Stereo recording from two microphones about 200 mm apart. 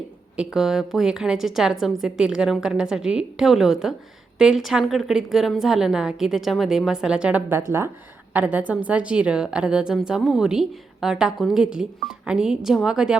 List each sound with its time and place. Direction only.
0.3 s a woman's voice: centre (ahead or behind)